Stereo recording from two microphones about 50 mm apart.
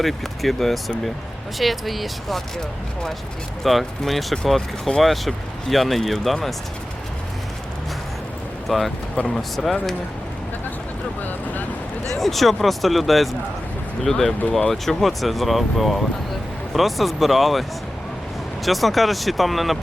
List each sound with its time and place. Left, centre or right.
0.0 s speech: centre
3.6 s speech: centre
8.6 s speech: centre
12.1 s speech: centre